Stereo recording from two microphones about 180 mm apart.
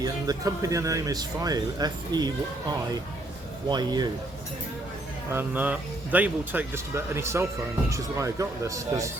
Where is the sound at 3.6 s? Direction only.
25° right (ahead or behind).